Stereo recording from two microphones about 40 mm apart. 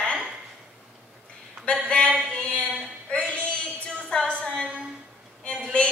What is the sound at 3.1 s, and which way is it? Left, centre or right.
Child singing, left.